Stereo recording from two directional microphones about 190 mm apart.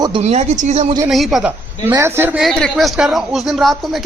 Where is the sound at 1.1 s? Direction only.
Centre (ahead or behind).